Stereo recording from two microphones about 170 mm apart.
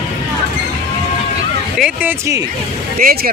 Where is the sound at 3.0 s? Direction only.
65° right (ahead or behind).